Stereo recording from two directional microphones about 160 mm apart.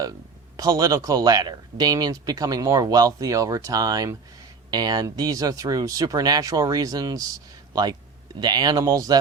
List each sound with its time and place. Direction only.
0.0 s speech: 20° right (ahead or behind)